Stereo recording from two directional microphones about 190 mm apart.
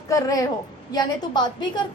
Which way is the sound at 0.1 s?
20° left (ahead or behind).